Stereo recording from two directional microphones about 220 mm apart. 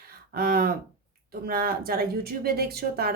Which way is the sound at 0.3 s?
40° right (ahead or behind).